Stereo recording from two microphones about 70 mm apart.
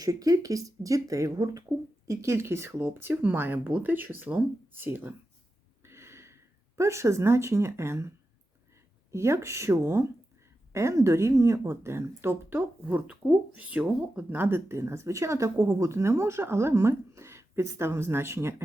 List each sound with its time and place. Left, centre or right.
0.0 s speech: right
5.8 s a sound: right
9.1 s speech: right